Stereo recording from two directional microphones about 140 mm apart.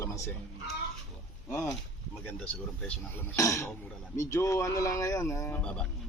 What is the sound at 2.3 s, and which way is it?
Speech, 10° left (ahead or behind).